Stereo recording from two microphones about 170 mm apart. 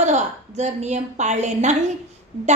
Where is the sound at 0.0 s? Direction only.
45° right (ahead or behind).